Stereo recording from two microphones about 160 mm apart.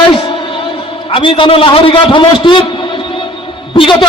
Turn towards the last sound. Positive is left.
turn(degrees=30)  # may be behind; listen again after turning